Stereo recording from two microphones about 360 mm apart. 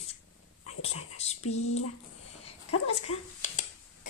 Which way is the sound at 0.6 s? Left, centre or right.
Left.